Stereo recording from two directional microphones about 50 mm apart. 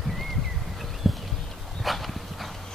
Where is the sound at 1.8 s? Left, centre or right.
Centre.